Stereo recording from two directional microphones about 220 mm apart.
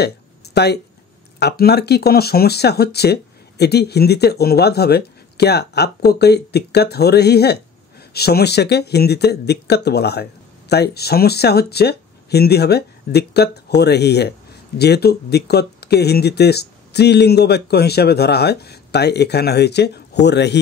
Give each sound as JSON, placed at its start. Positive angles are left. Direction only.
{"t": 1.4, "sound": "speech", "side_deg": 50}